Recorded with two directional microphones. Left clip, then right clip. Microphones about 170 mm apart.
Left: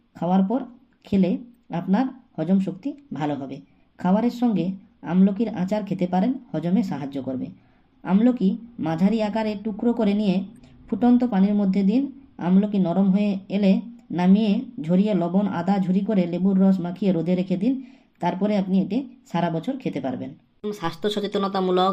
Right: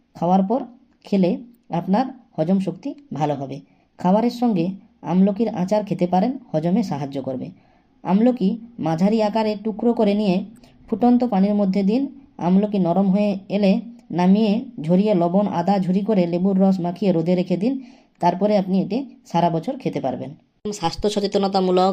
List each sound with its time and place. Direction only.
0.1 s a woman's voice: 30° right (ahead or behind)